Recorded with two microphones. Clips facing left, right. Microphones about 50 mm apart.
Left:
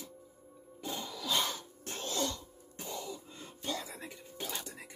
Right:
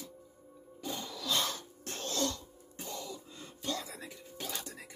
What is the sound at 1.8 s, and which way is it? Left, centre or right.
Throat clearing, centre.